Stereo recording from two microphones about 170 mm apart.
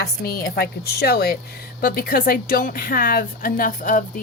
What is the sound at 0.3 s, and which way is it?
A woman's voice, 60° left (ahead or behind).